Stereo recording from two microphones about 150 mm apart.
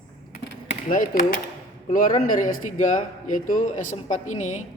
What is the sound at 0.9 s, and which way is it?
Speech, 60° left (ahead or behind).